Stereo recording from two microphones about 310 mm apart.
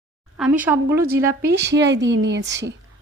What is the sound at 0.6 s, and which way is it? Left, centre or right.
Speech, centre.